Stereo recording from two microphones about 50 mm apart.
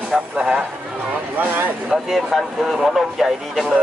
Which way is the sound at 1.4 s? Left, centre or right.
Right.